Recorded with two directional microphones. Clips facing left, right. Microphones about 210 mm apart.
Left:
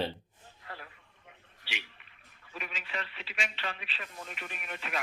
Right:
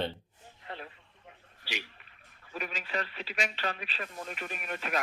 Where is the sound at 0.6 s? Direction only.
25° right (ahead or behind).